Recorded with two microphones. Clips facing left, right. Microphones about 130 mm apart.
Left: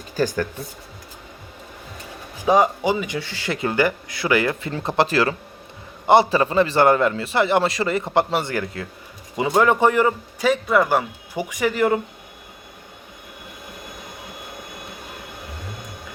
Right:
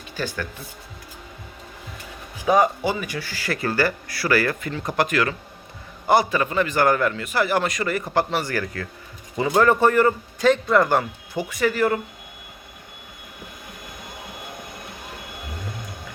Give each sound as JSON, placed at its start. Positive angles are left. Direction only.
{"t": 0.2, "sound": "speech", "side_deg": 40}
{"t": 2.5, "sound": "a man's voice", "side_deg": 20}